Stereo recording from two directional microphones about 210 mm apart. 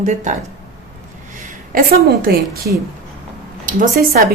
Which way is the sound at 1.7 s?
45° right (ahead or behind).